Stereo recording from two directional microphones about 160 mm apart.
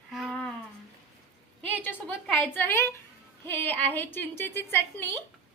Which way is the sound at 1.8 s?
10° left (ahead or behind).